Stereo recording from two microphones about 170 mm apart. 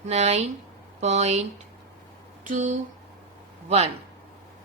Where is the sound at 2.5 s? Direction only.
45° right (ahead or behind).